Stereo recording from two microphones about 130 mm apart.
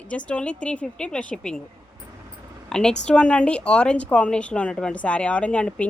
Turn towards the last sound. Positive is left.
turn(degrees=10)  # may be behind; listen again after turning